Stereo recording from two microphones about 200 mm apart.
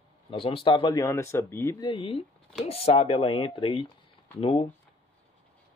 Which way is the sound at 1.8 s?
30° left (ahead or behind).